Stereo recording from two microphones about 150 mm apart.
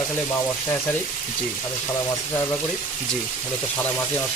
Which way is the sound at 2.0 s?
15° left (ahead or behind).